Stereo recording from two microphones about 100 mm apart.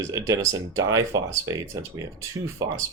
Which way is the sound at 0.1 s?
35° right (ahead or behind).